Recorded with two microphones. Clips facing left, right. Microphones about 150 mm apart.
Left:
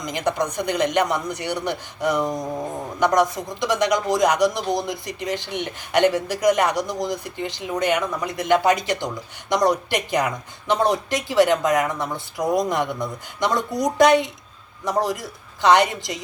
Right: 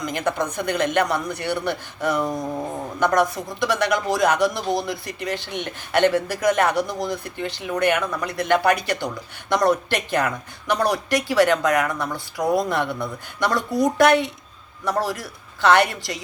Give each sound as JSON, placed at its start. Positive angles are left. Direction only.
{"t": 0.0, "sound": "speech", "side_deg": 15}